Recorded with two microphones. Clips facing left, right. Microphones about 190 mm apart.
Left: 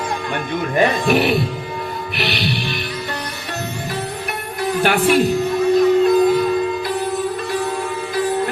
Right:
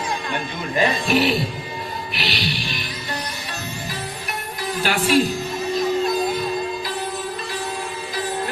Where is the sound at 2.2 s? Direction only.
55° left (ahead or behind).